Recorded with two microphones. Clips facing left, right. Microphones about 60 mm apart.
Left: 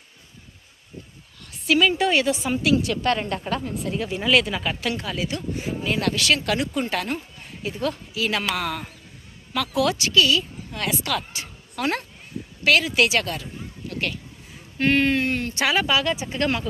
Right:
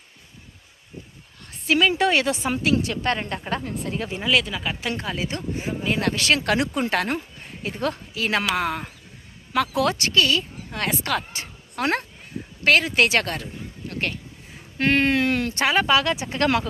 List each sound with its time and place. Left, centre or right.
1.5 s a sound: right
1.9 s a woman's voice: right
2.8 s speech: right
3.8 s speech: right
4.2 s speech: centre
4.8 s speech: right
6.4 s a woman's voice: right
8.5 s speech: right
9.6 s a woman's voice: right
14.8 s speech: right
15.6 s a woman's voice: right